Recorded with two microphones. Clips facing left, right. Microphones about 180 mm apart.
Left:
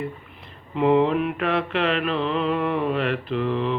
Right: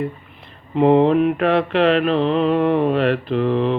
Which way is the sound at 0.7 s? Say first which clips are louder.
Right 5 dB; 35° right (ahead or behind).